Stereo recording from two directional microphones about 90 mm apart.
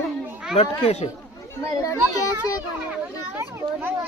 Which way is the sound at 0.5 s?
90° left.